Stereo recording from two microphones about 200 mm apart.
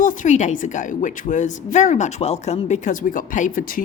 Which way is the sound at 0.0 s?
40° left (ahead or behind).